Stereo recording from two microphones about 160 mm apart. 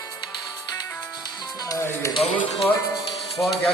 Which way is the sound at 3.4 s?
Centre (ahead or behind).